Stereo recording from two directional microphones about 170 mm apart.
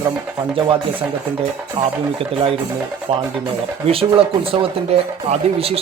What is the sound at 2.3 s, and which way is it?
Speech, 35° right (ahead or behind).